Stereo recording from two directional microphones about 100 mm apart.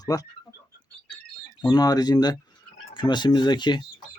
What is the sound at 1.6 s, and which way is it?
Speech, 45° left (ahead or behind).